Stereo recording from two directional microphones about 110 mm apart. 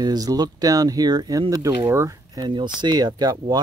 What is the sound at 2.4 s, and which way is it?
Speech, 45° right (ahead or behind).